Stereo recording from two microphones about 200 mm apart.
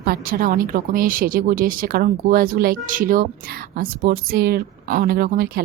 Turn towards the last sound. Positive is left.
turn(degrees=-45)  # may be behind; listen again after turning